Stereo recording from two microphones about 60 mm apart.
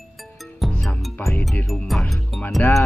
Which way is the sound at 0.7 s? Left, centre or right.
Centre.